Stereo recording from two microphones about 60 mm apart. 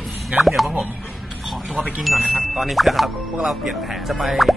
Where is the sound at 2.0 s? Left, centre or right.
Centre.